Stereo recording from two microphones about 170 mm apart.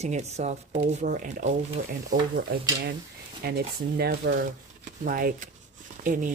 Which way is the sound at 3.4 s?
65° right (ahead or behind).